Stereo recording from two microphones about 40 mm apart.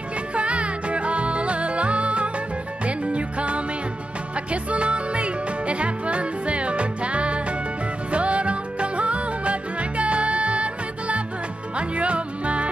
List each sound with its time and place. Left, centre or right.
0.3 s music: right